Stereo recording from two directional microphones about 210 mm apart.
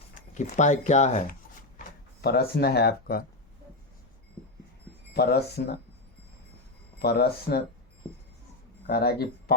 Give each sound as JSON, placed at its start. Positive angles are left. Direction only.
{"t": 0.1, "sound": "speech", "side_deg": 35}
{"t": 2.2, "sound": "speech", "side_deg": 50}
{"t": 5.1, "sound": "speech", "side_deg": 50}
{"t": 7.0, "sound": "speech", "side_deg": 50}
{"t": 8.9, "sound": "speech", "side_deg": 50}